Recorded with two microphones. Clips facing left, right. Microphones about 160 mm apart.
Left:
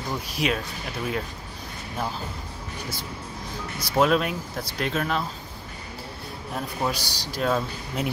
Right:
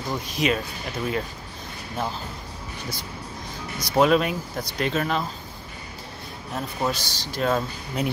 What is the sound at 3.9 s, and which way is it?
Speech, centre (ahead or behind).